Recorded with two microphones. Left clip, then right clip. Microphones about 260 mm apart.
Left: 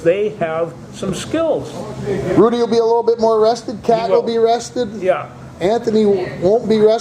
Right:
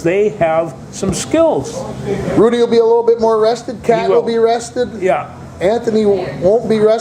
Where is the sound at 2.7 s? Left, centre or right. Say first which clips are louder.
Right 3 dB; left.